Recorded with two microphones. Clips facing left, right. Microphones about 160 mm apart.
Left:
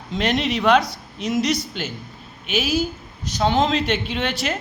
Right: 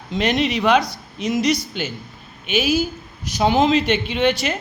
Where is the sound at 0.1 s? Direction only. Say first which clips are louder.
Right 2 dB; centre (ahead or behind).